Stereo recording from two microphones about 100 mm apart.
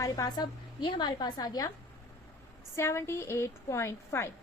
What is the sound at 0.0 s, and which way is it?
A woman's voice, 40° left (ahead or behind).